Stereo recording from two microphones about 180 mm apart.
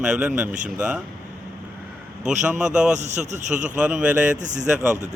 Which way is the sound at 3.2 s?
40° right (ahead or behind).